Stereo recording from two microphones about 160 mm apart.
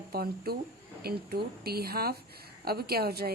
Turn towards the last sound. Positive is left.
turn(degrees=-75)  # may be behind; listen again after turning